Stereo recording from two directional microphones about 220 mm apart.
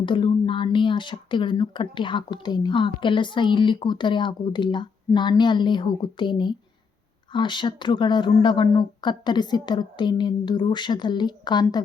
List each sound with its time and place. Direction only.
0.0 s speech: 20° left (ahead or behind)